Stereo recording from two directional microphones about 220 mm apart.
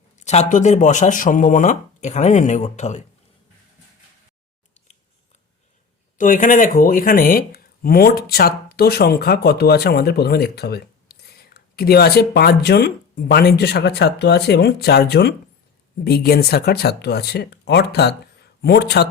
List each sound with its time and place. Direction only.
0.2 s speech: 30° left (ahead or behind)
6.1 s speech: 35° left (ahead or behind)